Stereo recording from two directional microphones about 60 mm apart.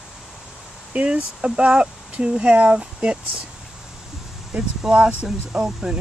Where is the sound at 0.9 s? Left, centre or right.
Centre.